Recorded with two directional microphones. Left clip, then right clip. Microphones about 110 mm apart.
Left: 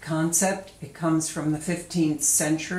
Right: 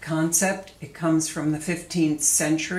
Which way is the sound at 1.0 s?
15° right (ahead or behind).